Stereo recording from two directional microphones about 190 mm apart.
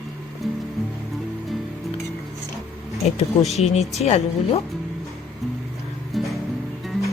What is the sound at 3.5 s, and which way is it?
Speech, 35° left (ahead or behind).